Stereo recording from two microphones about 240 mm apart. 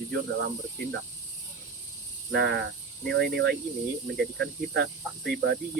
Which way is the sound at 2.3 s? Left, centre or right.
Right.